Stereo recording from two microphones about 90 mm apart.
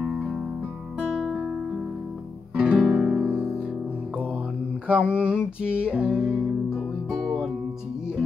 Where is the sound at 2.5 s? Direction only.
10° right (ahead or behind).